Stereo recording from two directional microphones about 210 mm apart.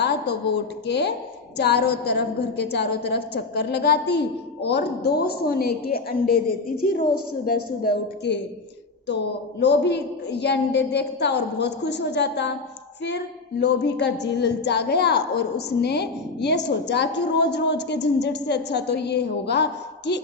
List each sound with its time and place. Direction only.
0.0 s a woman's voice: 50° left (ahead or behind)
7.4 s a woman's voice: 45° left (ahead or behind)